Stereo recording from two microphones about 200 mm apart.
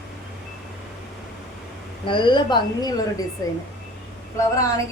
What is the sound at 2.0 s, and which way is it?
A woman's voice, 25° left (ahead or behind).